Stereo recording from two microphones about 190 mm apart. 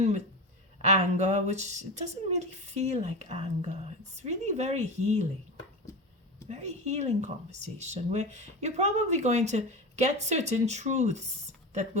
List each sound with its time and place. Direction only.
0.9 s speech: 35° right (ahead or behind)
6.5 s speech: 35° right (ahead or behind)